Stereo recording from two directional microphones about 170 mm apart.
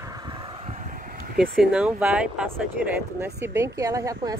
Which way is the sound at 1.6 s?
5° right (ahead or behind).